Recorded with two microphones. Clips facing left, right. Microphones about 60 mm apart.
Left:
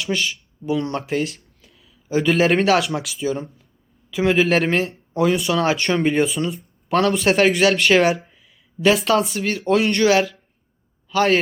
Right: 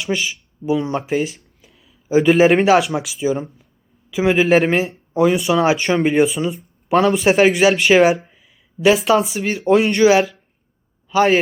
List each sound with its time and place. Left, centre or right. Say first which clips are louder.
0.0 s a man's voice: right 1 dB; centre